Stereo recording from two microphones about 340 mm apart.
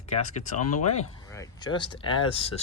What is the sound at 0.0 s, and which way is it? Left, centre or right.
Speech, centre.